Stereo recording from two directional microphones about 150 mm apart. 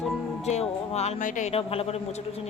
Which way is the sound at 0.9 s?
45° left (ahead or behind).